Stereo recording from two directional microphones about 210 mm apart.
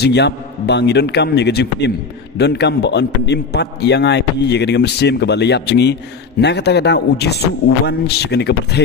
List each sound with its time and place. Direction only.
0.0 s a man's voice: 55° left (ahead or behind)